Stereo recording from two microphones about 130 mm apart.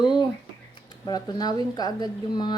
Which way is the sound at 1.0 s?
30° left (ahead or behind).